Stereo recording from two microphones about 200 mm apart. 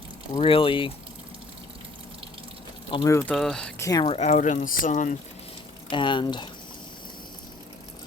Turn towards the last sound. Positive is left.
turn(degrees=25)  # may be behind; listen again after turning